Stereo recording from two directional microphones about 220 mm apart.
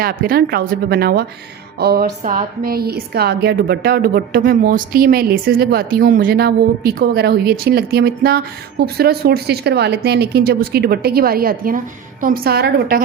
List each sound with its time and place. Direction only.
0.0 s a woman's voice: 40° right (ahead or behind)